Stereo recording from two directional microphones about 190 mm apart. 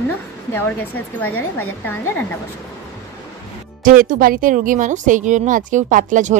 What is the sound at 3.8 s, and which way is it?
A woman's voice, 45° right (ahead or behind).